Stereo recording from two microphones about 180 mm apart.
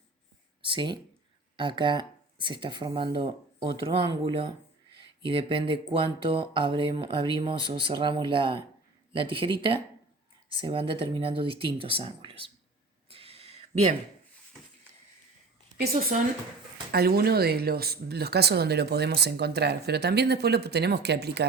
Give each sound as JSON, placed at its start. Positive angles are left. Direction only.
{"t": 0.6, "sound": "speech", "side_deg": -25}
{"t": 13.1, "sound": "a sound", "side_deg": -30}
{"t": 16.9, "sound": "speech", "side_deg": -60}